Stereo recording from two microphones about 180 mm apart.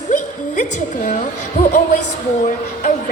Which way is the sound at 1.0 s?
40° left (ahead or behind).